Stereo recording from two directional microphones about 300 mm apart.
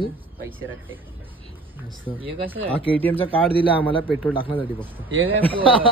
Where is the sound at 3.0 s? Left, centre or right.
Centre.